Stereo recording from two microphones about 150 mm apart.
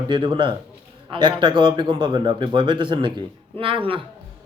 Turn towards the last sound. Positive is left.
turn(degrees=-35)  # may be behind; listen again after turning